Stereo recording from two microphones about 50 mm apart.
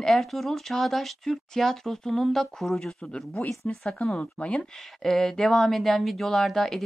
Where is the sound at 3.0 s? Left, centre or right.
Centre.